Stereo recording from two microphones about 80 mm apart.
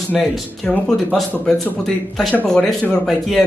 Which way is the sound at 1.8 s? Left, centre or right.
Centre.